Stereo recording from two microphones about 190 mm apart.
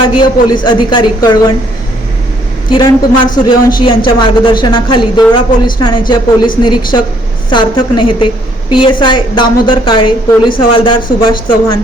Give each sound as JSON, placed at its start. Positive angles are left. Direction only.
{"t": 0.2, "sound": "a man's voice", "side_deg": 25}
{"t": 2.6, "sound": "a man's voice", "side_deg": 20}